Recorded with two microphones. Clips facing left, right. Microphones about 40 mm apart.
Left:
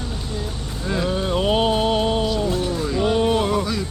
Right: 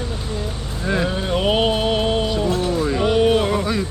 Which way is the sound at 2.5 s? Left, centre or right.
Centre.